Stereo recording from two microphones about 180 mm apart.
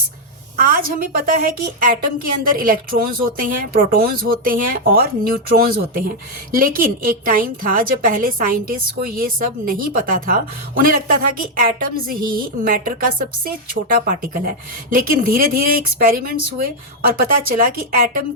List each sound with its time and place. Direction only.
0.5 s a woman's voice: 50° right (ahead or behind)